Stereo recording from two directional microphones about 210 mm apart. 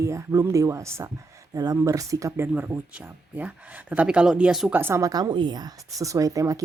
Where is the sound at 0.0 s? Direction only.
15° right (ahead or behind).